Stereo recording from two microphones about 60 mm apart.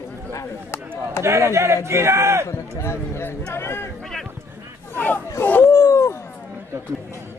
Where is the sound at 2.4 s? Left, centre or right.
Left.